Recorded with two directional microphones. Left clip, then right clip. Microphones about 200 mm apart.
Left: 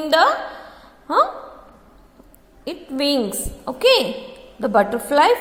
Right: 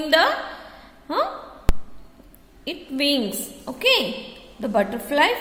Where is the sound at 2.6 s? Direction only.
15° left (ahead or behind).